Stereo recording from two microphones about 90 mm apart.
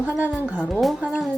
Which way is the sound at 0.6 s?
5° left (ahead or behind).